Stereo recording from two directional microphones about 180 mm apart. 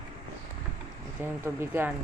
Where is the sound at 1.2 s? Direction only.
15° right (ahead or behind).